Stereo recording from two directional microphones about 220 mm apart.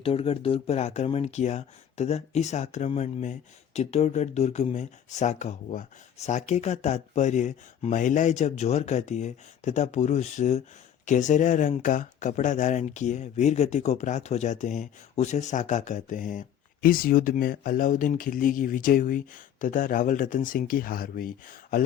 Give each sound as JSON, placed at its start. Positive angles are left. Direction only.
{"t": 0.0, "sound": "speech", "side_deg": 25}